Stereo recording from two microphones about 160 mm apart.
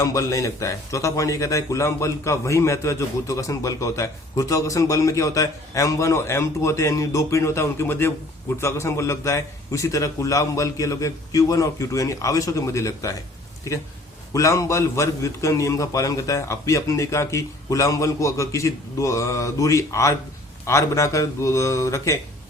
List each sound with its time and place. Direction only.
0.0 s a man's voice: 20° left (ahead or behind)
14.3 s a man's voice: 20° left (ahead or behind)